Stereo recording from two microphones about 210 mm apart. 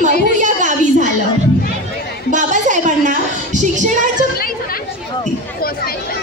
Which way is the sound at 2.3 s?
35° right (ahead or behind).